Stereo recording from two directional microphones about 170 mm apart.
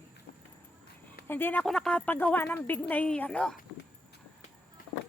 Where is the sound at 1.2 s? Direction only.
10° left (ahead or behind).